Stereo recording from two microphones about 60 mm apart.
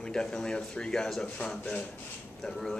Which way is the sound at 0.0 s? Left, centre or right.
Centre.